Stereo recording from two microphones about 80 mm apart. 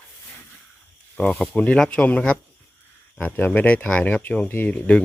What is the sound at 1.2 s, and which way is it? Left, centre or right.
Speech, centre.